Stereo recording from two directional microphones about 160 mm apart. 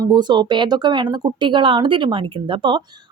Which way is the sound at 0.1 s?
25° right (ahead or behind).